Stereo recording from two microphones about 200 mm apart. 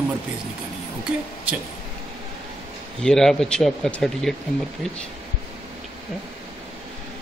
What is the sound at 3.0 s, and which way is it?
A man's voice, 5° left (ahead or behind).